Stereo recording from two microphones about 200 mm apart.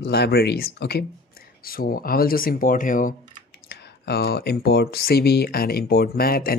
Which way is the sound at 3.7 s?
55° left (ahead or behind).